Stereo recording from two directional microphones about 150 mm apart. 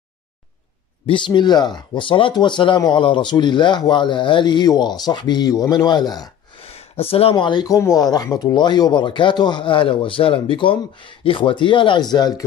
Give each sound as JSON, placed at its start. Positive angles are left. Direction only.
{"t": 1.0, "sound": "speech", "side_deg": 30}
{"t": 6.6, "sound": "speech", "side_deg": 40}